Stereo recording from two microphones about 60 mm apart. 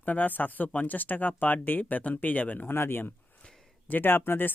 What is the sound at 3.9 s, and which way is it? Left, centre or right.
Speech, left.